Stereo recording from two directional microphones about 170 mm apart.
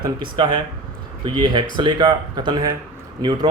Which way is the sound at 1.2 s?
25° right (ahead or behind).